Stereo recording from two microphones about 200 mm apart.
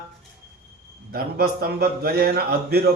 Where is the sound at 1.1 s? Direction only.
50° right (ahead or behind).